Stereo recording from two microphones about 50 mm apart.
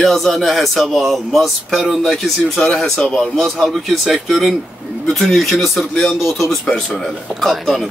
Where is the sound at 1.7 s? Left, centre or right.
Centre.